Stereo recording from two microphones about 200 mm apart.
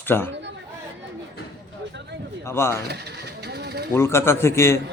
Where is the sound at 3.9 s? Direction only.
10° left (ahead or behind).